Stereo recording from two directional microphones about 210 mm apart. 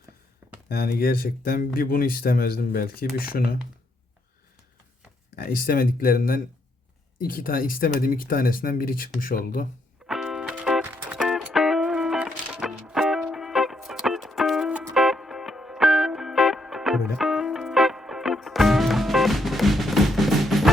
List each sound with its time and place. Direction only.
0.7 s speech: 45° left (ahead or behind)
5.4 s speech: 40° left (ahead or behind)
10.1 s music: centre (ahead or behind)